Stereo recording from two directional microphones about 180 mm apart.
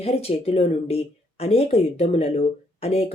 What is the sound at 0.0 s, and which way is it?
Speech, 35° left (ahead or behind).